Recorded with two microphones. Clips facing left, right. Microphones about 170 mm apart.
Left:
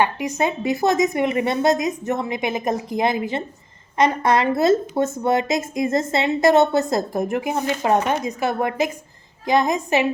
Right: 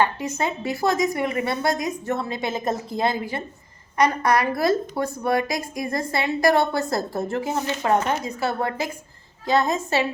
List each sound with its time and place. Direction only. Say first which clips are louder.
0.0 s a woman's voice: left 2 dB; 15° left (ahead or behind)